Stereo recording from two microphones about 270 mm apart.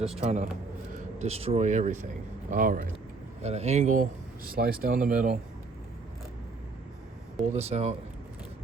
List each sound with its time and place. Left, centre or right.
0.2 s speech: right
7.4 s speech: right